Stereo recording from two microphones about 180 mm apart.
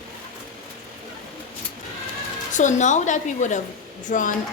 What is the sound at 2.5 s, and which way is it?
A woman's voice, 40° left (ahead or behind).